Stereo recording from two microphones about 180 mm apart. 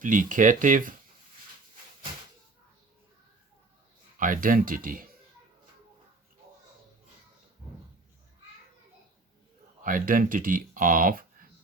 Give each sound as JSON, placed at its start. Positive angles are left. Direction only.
{"t": 0.0, "sound": "speech", "side_deg": -45}
{"t": 4.2, "sound": "speech", "side_deg": -50}
{"t": 9.8, "sound": "speech", "side_deg": -50}